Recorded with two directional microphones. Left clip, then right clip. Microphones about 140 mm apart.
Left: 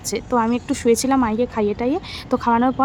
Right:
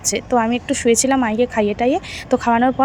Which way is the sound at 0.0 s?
5° right (ahead or behind).